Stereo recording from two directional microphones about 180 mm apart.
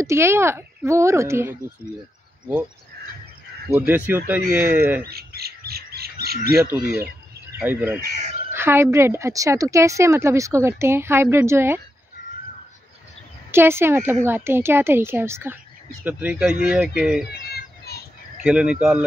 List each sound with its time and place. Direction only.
0.0 s a woman's voice: 15° right (ahead or behind)
3.7 s a woman's voice: 10° right (ahead or behind)
5.0 s squawk: 60° right (ahead or behind)
7.6 s a woman's voice: 10° right (ahead or behind)
13.5 s a woman's voice: 15° right (ahead or behind)
17.3 s a sound: 60° left (ahead or behind)
18.4 s speech: 5° right (ahead or behind)